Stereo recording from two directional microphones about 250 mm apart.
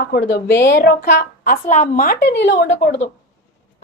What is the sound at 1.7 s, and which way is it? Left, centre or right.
A woman's voice, left.